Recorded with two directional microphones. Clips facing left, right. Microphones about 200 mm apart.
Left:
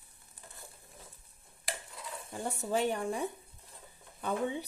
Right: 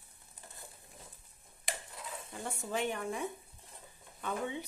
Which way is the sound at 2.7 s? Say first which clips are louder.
Left 4 dB; 35° left (ahead or behind).